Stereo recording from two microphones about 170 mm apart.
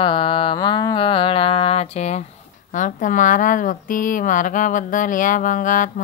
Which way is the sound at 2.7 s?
50° left (ahead or behind).